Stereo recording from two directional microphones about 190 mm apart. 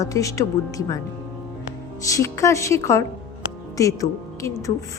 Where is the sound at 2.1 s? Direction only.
15° left (ahead or behind).